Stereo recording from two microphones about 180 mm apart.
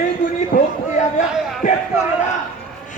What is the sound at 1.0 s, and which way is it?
Speech, 45° left (ahead or behind).